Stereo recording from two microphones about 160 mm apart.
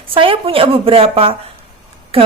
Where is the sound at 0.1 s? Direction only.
35° right (ahead or behind).